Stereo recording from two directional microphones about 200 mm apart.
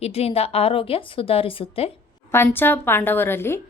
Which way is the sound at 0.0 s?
30° left (ahead or behind).